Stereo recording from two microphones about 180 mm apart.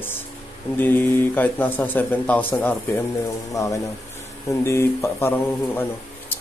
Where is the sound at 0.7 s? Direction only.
10° left (ahead or behind).